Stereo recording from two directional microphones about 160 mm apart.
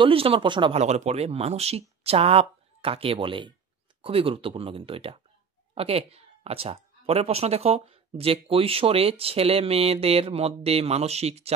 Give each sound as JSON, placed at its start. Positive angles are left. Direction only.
{"t": 0.0, "sound": "speech", "side_deg": -35}
{"t": 0.7, "sound": "speech", "side_deg": -45}